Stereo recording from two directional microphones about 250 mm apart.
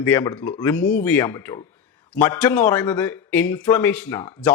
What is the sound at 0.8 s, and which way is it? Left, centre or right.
Speech, left.